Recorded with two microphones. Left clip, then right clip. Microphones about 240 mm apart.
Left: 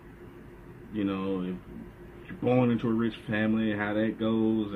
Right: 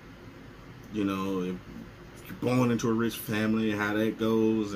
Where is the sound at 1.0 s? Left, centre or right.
Centre.